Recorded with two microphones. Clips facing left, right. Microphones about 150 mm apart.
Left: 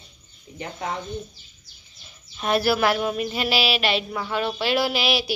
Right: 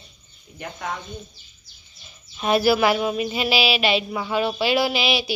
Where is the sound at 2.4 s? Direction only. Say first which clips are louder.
Right 3 dB; 5° right (ahead or behind).